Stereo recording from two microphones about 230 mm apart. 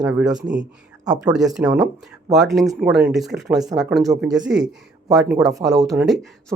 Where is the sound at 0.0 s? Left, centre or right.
Centre.